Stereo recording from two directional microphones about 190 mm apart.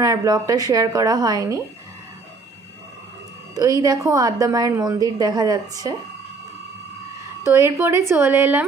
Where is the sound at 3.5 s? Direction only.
20° right (ahead or behind).